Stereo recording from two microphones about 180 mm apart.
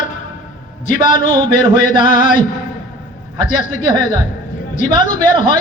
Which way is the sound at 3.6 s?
45° left (ahead or behind).